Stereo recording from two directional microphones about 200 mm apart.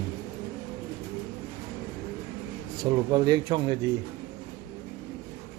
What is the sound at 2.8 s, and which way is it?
Speech, 20° right (ahead or behind).